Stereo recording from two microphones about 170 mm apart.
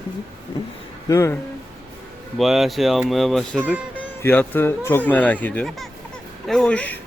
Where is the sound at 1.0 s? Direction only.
15° left (ahead or behind).